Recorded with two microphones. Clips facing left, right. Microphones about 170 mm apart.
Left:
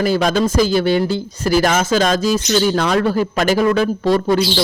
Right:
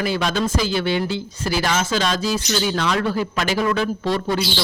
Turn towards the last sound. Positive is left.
turn(degrees=45)  # may be behind; listen again after turning